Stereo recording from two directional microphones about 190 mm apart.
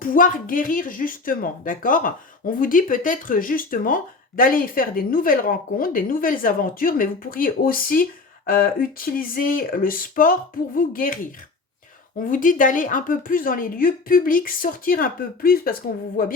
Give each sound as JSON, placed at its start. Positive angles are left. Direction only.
{"t": 0.0, "sound": "speech", "side_deg": 45}
{"t": 12.3, "sound": "speech", "side_deg": 45}